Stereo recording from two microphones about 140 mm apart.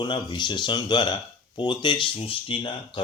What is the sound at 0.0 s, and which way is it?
Speech, 35° left (ahead or behind).